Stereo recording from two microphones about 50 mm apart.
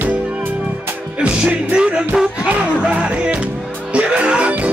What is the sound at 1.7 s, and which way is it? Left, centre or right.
Music, right.